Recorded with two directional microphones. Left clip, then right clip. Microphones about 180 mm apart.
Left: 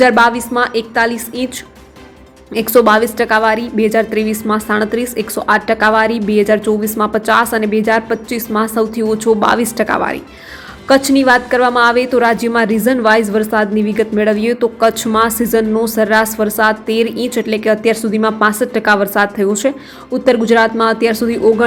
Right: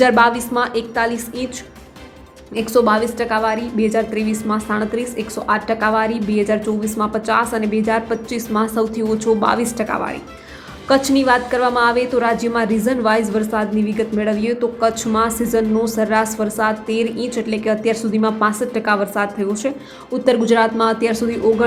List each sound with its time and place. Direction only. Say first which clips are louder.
0.0 s a woman's voice: left 3 dB; 10° left (ahead or behind)
2.6 s a woman's voice: left 5 dB; 20° left (ahead or behind)